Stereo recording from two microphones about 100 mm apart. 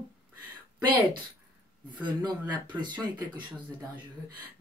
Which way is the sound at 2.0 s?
50° right (ahead or behind).